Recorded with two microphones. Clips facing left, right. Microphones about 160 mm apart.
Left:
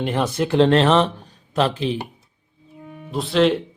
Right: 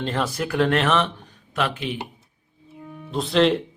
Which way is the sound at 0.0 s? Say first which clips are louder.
Left 4 dB; 20° left (ahead or behind).